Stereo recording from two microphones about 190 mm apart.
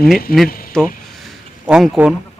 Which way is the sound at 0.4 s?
50° left (ahead or behind).